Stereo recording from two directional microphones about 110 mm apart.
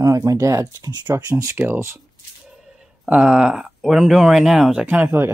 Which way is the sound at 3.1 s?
5° right (ahead or behind).